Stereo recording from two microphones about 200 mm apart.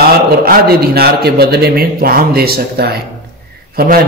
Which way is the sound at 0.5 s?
50° right (ahead or behind).